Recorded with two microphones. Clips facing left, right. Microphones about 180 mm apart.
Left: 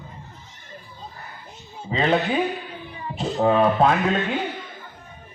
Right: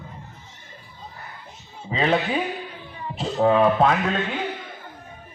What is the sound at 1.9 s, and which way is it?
Speech, 5° right (ahead or behind).